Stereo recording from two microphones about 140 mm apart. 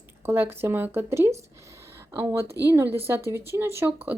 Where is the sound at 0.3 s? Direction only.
15° right (ahead or behind).